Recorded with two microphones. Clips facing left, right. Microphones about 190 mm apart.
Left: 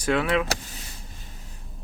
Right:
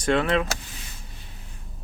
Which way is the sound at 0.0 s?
5° left (ahead or behind).